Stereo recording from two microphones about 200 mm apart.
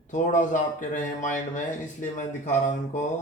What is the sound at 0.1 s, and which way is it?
Speech, 40° left (ahead or behind).